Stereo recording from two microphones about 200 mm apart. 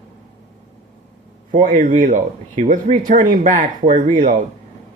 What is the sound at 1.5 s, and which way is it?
Speech, 40° right (ahead or behind).